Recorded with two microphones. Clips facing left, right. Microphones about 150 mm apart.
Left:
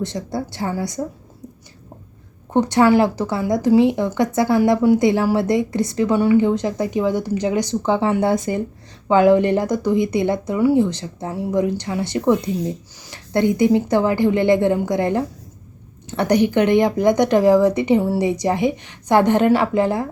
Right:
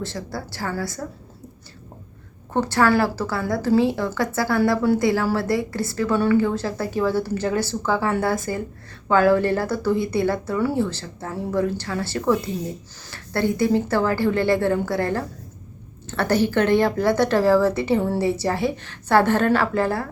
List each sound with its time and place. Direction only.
0.0 s a woman's voice: 20° left (ahead or behind)
2.5 s a woman's voice: 20° left (ahead or behind)